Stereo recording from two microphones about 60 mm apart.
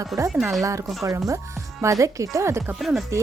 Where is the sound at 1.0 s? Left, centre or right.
Right.